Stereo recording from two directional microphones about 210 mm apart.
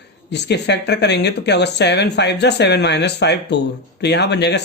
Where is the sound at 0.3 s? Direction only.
55° left (ahead or behind).